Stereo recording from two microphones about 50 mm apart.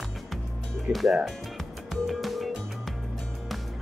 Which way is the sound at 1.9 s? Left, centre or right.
Centre.